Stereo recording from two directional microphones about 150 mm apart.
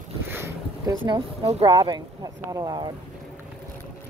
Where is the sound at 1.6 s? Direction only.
30° right (ahead or behind).